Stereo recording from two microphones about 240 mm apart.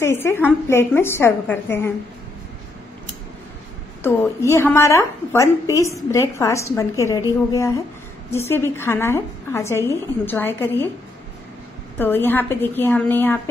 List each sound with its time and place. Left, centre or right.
0.0 s a woman's voice: centre
4.0 s a woman's voice: centre
12.0 s a woman's voice: centre